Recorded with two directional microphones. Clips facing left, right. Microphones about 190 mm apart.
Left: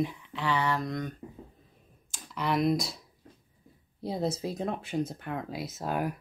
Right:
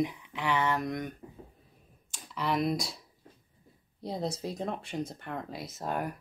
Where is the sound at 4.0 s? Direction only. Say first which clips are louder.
Left 3 dB; 5° left (ahead or behind).